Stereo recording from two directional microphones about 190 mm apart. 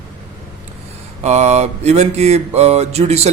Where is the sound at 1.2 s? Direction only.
35° right (ahead or behind).